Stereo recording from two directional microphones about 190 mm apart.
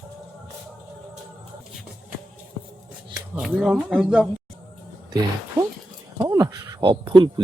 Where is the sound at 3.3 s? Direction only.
5° right (ahead or behind).